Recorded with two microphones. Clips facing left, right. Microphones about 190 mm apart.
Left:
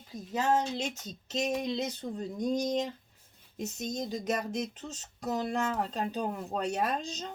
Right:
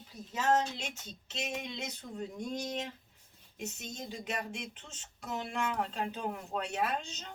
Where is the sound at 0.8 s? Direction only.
40° left (ahead or behind).